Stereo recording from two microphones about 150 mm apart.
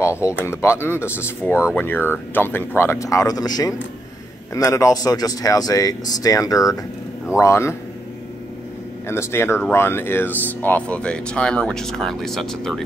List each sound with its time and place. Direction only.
0.0 s speech: 20° left (ahead or behind)
9.0 s speech: 15° left (ahead or behind)